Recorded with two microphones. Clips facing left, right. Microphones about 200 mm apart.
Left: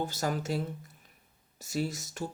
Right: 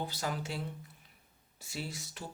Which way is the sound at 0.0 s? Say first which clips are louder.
Left 5 dB; 45° left (ahead or behind).